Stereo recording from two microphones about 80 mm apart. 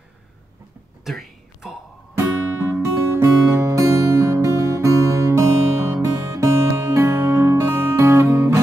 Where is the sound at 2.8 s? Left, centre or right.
Right.